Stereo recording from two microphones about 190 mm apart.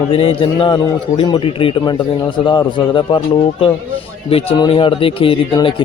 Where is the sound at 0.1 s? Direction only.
30° left (ahead or behind).